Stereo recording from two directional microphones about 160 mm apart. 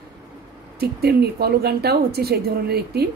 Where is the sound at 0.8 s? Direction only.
80° right.